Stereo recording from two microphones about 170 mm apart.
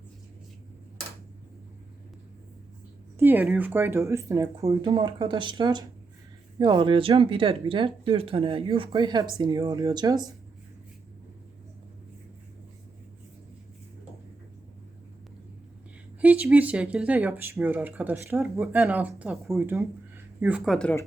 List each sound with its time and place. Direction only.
3.2 s speech: 15° right (ahead or behind)
4.9 s speech: 30° right (ahead or behind)
16.2 s speech: 10° right (ahead or behind)
19.5 s speech: 15° right (ahead or behind)